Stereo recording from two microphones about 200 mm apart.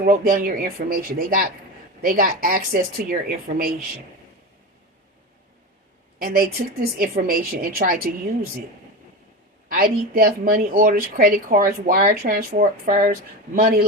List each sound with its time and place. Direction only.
0.0 s speech: 45° right (ahead or behind)
6.1 s speech: 45° right (ahead or behind)
9.6 s speech: 45° right (ahead or behind)